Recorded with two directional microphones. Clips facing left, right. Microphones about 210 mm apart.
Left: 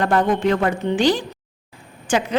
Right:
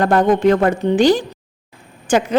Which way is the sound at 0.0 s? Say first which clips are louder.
Right 5 dB; 40° right (ahead or behind).